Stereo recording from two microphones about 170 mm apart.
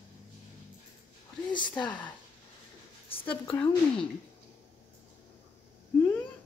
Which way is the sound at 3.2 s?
10° left (ahead or behind).